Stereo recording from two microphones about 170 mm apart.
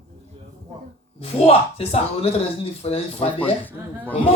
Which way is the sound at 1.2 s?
35° left (ahead or behind).